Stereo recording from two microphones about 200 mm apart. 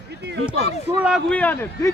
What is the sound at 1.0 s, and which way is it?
Speech, centre (ahead or behind).